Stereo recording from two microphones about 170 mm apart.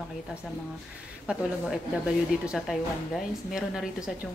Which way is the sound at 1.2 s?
5° right (ahead or behind).